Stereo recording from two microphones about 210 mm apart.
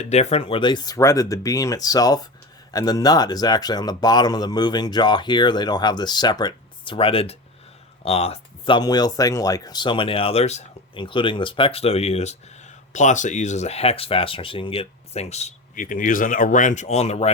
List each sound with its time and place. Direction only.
0.0 s speech: 30° left (ahead or behind)